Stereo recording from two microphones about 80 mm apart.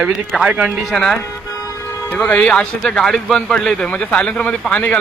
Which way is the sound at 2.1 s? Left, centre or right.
Centre.